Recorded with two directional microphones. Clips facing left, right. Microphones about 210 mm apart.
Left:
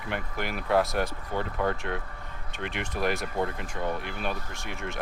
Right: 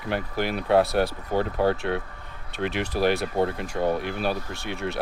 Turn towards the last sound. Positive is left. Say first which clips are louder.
# right 6 dB
turn(degrees=-35)  # may be behind; listen again after turning